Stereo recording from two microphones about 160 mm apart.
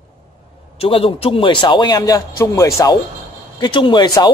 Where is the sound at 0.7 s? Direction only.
35° left (ahead or behind).